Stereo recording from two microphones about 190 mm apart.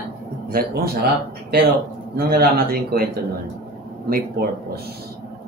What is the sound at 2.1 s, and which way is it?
Speech, 50° right (ahead or behind).